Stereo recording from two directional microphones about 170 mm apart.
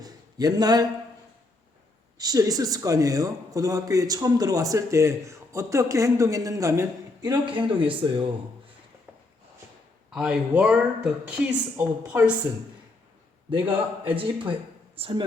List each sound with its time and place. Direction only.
0.0 s a sound: 20° right (ahead or behind)
2.1 s a man's voice: 20° right (ahead or behind)
9.1 s walk: 10° right (ahead or behind)
10.1 s speech: 5° right (ahead or behind)
14.0 s speech: 30° right (ahead or behind)